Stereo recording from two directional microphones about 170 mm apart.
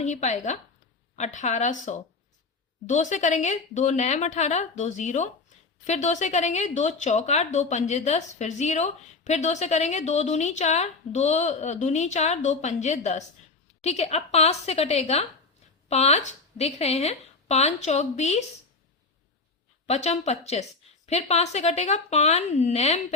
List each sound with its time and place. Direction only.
0.0 s a woman's voice: 45° left (ahead or behind)
19.9 s a woman's voice: 40° left (ahead or behind)